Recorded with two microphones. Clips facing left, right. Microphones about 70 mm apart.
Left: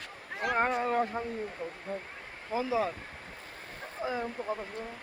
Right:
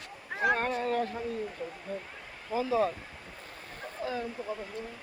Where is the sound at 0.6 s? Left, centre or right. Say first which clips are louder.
Left 2 dB; left.